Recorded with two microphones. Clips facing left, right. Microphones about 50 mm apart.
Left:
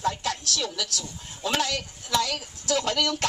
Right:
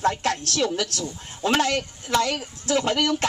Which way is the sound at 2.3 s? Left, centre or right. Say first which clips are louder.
Right 3 dB; right.